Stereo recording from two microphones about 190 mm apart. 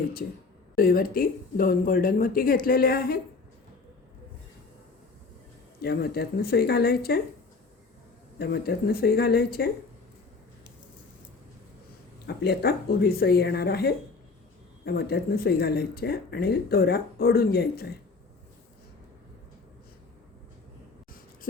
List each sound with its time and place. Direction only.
0.8 s speech: 50° left (ahead or behind)
5.8 s speech: 55° left (ahead or behind)
8.4 s speech: 55° left (ahead or behind)
12.2 s speech: 60° left (ahead or behind)
21.5 s a sound: 50° left (ahead or behind)